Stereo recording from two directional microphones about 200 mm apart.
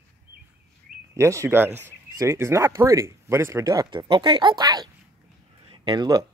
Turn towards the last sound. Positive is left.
turn(degrees=-20)  # may be behind; listen again after turning